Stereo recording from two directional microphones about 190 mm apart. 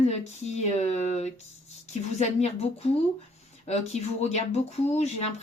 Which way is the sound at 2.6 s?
35° left (ahead or behind).